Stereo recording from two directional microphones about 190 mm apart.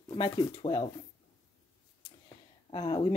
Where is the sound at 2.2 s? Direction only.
25° left (ahead or behind).